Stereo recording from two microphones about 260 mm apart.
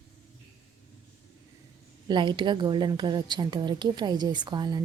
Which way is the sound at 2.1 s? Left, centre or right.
Centre.